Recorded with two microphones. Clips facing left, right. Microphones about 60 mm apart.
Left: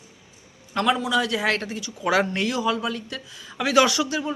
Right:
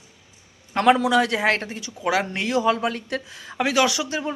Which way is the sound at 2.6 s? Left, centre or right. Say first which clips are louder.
Right 4 dB; right.